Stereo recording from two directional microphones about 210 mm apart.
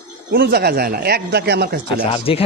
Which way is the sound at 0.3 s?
45° right (ahead or behind).